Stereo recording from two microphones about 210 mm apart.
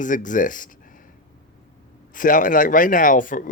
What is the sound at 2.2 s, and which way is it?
Speech, 40° left (ahead or behind).